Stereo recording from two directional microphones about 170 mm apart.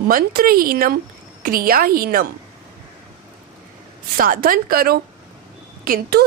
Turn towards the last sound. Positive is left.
turn(degrees=-65)  # may be behind; listen again after turning